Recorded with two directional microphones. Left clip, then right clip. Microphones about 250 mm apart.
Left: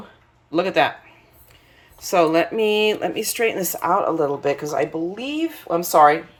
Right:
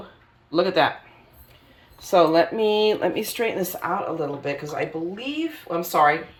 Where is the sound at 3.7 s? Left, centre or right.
Centre.